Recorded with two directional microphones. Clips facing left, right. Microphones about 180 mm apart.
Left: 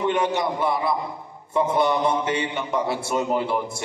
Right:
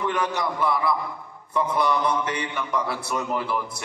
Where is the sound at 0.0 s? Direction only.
25° left (ahead or behind).